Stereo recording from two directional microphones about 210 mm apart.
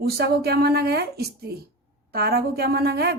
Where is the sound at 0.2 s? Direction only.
50° right (ahead or behind).